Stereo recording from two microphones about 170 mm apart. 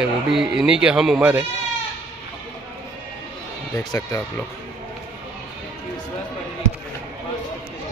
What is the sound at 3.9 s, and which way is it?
Speech, 20° left (ahead or behind).